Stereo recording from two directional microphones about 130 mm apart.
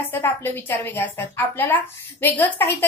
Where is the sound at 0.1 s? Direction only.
15° left (ahead or behind).